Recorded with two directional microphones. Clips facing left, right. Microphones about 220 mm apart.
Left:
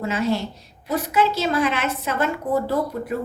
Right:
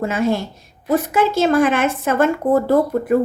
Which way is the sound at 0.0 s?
50° right (ahead or behind).